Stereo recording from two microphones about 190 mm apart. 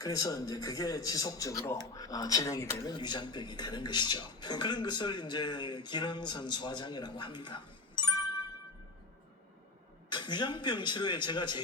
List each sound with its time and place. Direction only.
0.0 s a man's voice: 20° left (ahead or behind)
10.1 s a man's voice: 25° left (ahead or behind)